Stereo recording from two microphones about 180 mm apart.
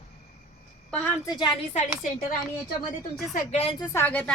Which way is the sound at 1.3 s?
25° left (ahead or behind).